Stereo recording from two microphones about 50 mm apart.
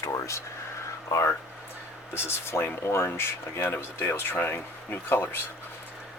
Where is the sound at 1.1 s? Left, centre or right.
Left.